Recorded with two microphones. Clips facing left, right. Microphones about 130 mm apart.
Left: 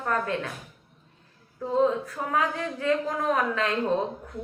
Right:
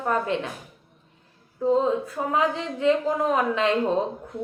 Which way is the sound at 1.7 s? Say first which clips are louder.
Right 2 dB; 20° right (ahead or behind).